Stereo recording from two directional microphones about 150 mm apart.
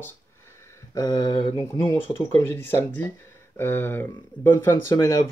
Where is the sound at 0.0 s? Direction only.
20° left (ahead or behind).